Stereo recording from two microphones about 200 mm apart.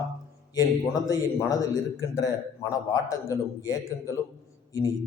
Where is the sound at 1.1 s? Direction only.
15° left (ahead or behind).